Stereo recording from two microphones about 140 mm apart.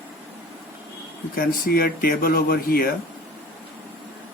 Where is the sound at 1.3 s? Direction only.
90° left.